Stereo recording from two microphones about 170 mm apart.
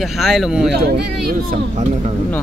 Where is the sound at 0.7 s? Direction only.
65° right (ahead or behind); by 2.1 s 50° right (ahead or behind).